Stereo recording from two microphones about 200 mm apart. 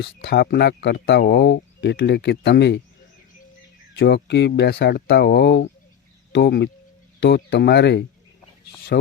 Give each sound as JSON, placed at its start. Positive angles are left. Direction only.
{"t": 0.0, "sound": "speech", "side_deg": 55}
{"t": 3.9, "sound": "speech", "side_deg": 60}